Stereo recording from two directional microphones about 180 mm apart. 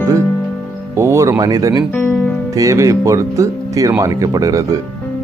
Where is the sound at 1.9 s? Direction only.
10° left (ahead or behind).